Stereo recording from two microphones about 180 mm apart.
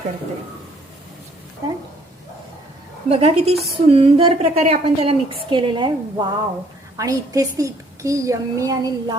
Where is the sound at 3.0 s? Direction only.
35° right (ahead or behind).